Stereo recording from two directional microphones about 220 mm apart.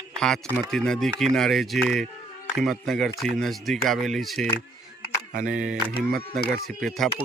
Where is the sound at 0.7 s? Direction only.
Centre (ahead or behind).